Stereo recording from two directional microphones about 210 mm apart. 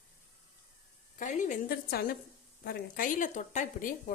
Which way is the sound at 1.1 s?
35° left (ahead or behind).